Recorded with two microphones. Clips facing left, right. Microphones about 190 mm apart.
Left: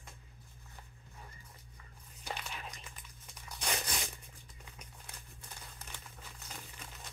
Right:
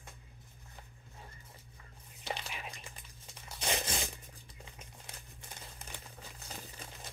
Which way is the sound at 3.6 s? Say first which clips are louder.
Right 3 dB; 25° right (ahead or behind).